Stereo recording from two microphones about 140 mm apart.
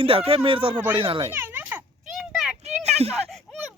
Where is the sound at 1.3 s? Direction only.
15° right (ahead or behind).